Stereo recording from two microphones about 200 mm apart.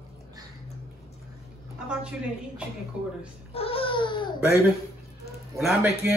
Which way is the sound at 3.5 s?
30° left (ahead or behind).